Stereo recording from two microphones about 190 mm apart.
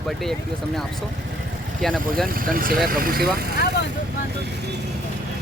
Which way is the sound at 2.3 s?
50° right (ahead or behind).